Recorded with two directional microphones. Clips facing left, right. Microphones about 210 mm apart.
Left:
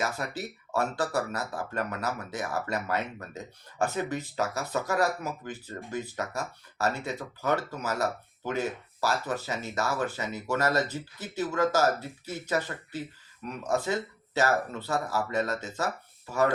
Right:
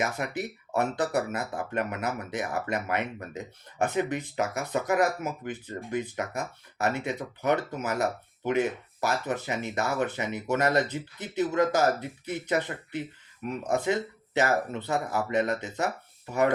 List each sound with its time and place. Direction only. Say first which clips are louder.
0.0 s speech: right 2 dB; 20° right (ahead or behind)